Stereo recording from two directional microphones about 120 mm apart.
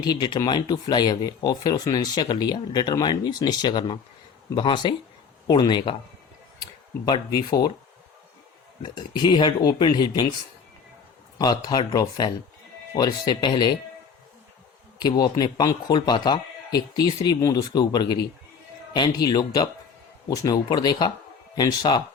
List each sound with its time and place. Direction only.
0.0 s a man's voice: 35° left (ahead or behind)
8.8 s a man's voice: 40° left (ahead or behind)
11.3 s a man's voice: 35° left (ahead or behind)
14.9 s a man's voice: 35° left (ahead or behind)